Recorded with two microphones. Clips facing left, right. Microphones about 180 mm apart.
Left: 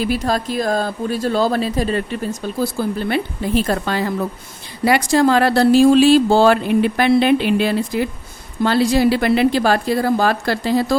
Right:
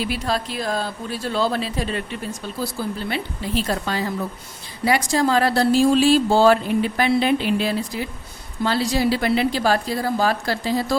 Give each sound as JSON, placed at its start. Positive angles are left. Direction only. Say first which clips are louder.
{"t": 0.0, "sound": "speech", "louder": "left 5 dB", "side_deg": 45}
{"t": 3.1, "sound": "a woman's voice", "louder": "left 6 dB", "side_deg": 50}